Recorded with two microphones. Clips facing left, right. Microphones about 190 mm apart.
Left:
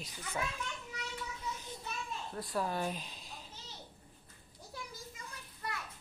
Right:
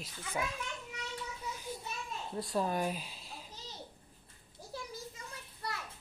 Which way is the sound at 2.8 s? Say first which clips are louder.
Right 2 dB; 5° right (ahead or behind).